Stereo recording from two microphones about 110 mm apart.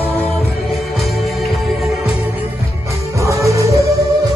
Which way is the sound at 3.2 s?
30° right (ahead or behind).